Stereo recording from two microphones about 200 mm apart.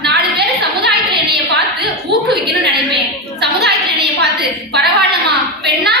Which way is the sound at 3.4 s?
55° right (ahead or behind).